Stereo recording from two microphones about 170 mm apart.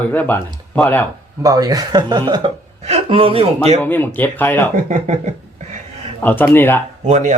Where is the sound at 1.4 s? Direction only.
20° right (ahead or behind).